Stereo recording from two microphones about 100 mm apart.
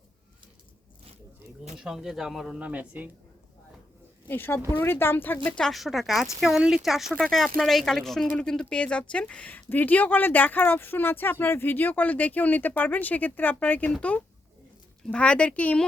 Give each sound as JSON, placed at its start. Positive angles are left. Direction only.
{"t": 1.7, "sound": "speech", "side_deg": -5}
{"t": 2.6, "sound": "speech", "side_deg": -15}
{"t": 4.3, "sound": "speech", "side_deg": 20}
{"t": 15.0, "sound": "speech", "side_deg": 10}